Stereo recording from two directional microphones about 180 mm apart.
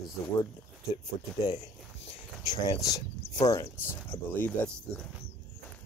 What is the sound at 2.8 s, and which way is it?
Speech, 20° left (ahead or behind).